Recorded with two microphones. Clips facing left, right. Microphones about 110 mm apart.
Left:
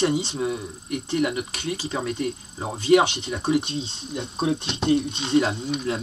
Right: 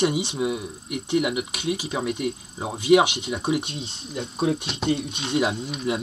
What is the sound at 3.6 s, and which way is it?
Speech, 30° left (ahead or behind).